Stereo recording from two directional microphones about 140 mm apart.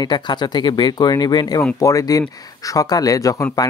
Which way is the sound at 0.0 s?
30° left (ahead or behind).